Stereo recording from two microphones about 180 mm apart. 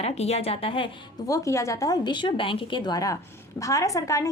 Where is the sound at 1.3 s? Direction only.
15° left (ahead or behind).